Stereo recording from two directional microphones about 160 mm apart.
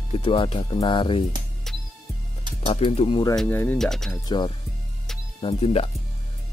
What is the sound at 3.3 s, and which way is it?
Speech, 10° left (ahead or behind).